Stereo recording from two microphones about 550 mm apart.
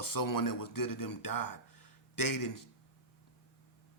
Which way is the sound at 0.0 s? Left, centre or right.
Left.